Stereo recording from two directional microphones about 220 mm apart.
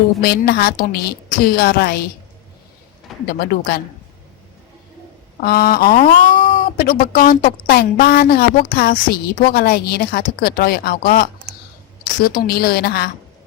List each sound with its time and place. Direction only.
0.2 s speech: 45° left (ahead or behind)
3.2 s speech: 45° left (ahead or behind)
5.4 s speech: 45° left (ahead or behind)